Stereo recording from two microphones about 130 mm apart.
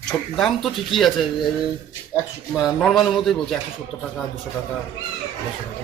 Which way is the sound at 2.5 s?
Centre (ahead or behind).